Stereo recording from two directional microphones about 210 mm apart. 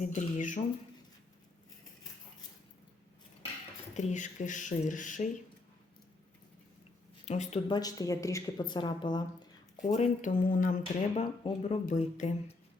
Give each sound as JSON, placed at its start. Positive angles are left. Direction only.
{"t": 0.0, "sound": "speech", "side_deg": 35}
{"t": 3.9, "sound": "speech", "side_deg": 35}
{"t": 7.3, "sound": "speech", "side_deg": 30}
{"t": 7.7, "sound": "speech", "side_deg": 20}
{"t": 9.8, "sound": "speech", "side_deg": 35}